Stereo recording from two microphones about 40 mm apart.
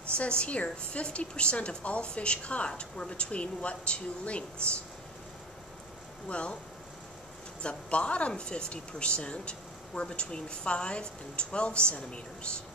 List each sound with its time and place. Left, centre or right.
0.1 s a woman's voice: left
6.2 s speech: left
7.6 s speech: left